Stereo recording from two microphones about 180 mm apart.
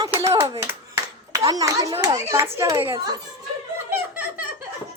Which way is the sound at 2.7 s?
25° right (ahead or behind).